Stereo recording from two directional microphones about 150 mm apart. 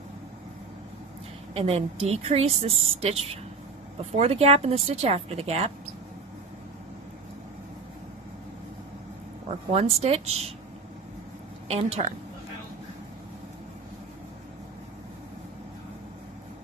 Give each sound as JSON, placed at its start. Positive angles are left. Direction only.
{"t": 1.5, "sound": "speech", "side_deg": -40}
{"t": 9.7, "sound": "speech", "side_deg": -45}
{"t": 11.7, "sound": "speech", "side_deg": -45}